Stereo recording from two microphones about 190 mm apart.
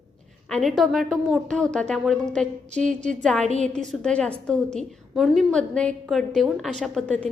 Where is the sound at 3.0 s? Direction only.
5° left (ahead or behind).